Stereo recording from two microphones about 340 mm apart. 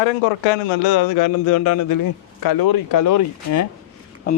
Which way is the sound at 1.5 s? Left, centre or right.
Left.